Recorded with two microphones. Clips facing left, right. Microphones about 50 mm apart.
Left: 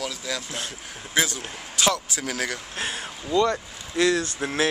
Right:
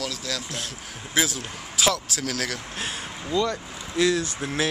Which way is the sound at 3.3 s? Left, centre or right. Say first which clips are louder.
Left 3 dB; left.